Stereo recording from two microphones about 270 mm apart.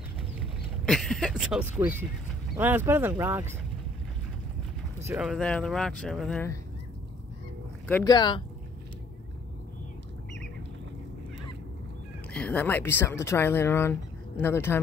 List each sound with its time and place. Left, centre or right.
0.8 s speech: centre
5.0 s speech: centre
7.9 s speech: centre
12.3 s speech: centre